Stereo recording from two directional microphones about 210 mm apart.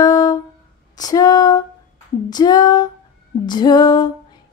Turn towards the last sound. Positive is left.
turn(degrees=20)  # may be behind; listen again after turning